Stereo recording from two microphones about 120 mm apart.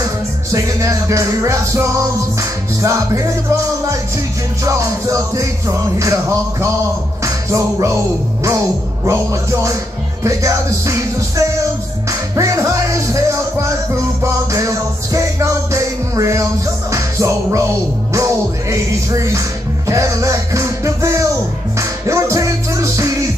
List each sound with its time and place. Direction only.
0.5 s music: 25° right (ahead or behind)